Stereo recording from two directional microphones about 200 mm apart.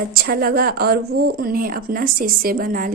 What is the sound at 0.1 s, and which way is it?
Speech, 50° right (ahead or behind).